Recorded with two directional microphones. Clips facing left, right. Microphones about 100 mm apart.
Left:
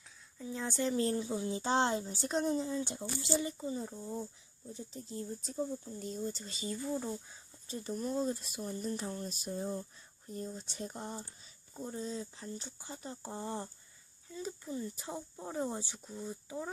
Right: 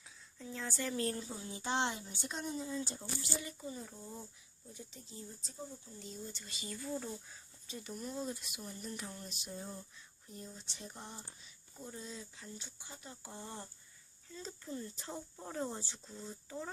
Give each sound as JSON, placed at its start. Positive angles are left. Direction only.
{"t": 0.3, "sound": "speech", "side_deg": 15}
{"t": 2.6, "sound": "speech", "side_deg": 20}
{"t": 4.7, "sound": "speech", "side_deg": 35}
{"t": 5.1, "sound": "speech", "side_deg": 55}
{"t": 6.4, "sound": "speech", "side_deg": 35}
{"t": 7.7, "sound": "speech", "side_deg": 40}
{"t": 14.3, "sound": "speech", "side_deg": 10}